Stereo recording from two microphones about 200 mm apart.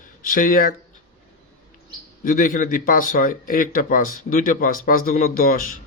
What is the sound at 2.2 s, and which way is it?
A man's voice, 45° left (ahead or behind).